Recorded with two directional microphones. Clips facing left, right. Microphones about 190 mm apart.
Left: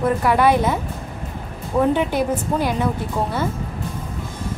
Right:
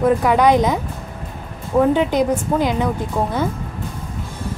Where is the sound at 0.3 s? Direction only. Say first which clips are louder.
Even; 15° right (ahead or behind).